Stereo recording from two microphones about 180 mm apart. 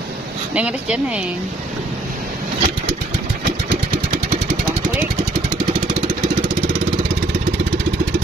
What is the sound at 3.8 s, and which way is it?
Vehicle, 55° right (ahead or behind).